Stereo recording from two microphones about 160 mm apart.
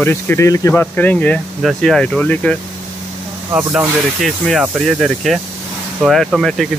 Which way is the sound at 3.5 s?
10° right (ahead or behind).